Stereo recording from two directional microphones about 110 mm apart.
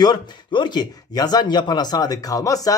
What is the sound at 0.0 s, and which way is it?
Speech, 40° left (ahead or behind).